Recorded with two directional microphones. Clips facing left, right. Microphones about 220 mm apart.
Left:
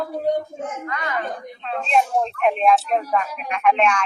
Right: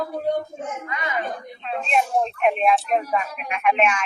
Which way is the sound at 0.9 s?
15° right (ahead or behind).